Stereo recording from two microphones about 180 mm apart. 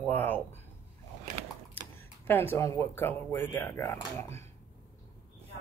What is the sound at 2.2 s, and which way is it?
Speech, 10° left (ahead or behind).